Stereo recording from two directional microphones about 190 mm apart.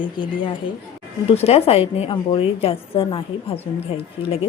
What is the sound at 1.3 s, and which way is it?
A woman's voice, 30° left (ahead or behind).